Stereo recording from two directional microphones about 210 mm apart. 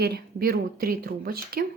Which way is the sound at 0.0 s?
50° right (ahead or behind).